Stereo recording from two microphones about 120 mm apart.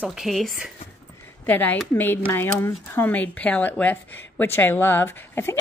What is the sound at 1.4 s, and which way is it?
Speech, 15° left (ahead or behind).